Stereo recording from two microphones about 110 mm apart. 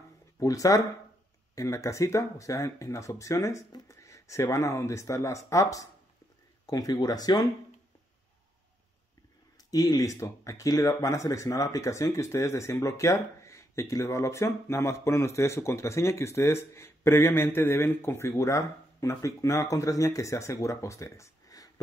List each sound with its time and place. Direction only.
0.4 s speech: 30° left (ahead or behind)
9.7 s speech: 35° left (ahead or behind)